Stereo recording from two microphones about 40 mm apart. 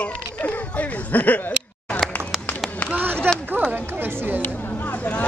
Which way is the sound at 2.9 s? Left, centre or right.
Right.